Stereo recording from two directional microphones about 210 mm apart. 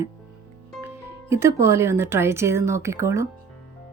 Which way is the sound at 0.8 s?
10° right (ahead or behind).